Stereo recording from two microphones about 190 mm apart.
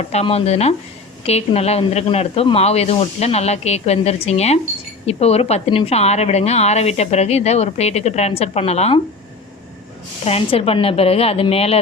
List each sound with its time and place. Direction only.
0.0 s a woman's voice: 35° left (ahead or behind)
10.2 s a woman's voice: 30° left (ahead or behind)